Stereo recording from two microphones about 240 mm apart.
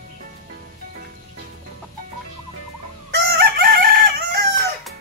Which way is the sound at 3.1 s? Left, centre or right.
Right.